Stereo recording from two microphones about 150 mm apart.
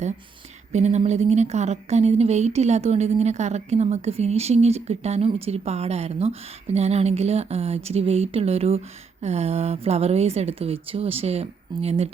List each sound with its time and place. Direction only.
0.7 s speech: 50° right (ahead or behind)